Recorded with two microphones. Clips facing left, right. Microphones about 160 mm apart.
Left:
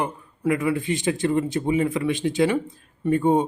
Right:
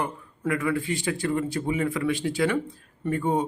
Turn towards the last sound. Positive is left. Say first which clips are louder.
# left 6 dB
turn(degrees=20)  # may be behind; listen again after turning